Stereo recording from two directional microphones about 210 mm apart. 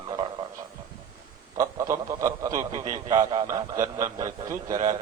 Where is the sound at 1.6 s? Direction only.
15° right (ahead or behind).